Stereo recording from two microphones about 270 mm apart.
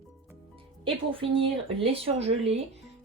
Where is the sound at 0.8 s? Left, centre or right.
Centre.